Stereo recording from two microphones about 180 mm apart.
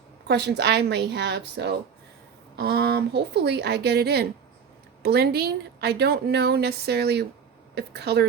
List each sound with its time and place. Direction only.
0.3 s speech: 70° right (ahead or behind)